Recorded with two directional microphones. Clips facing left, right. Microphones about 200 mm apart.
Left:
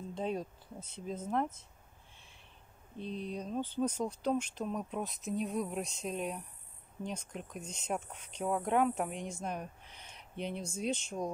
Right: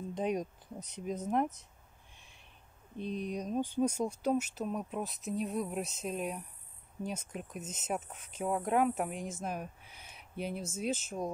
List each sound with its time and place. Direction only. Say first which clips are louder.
0.1 s speech: right 3 dB; 15° right (ahead or behind)
3.0 s speech: right 3 dB; 15° right (ahead or behind)